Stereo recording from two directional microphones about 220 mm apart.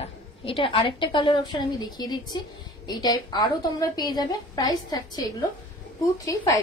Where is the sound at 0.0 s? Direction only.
25° left (ahead or behind).